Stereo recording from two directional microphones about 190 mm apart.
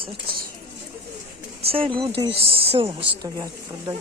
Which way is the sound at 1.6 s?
30° right (ahead or behind).